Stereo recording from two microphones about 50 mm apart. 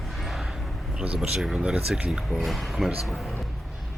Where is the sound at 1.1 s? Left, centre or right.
Centre.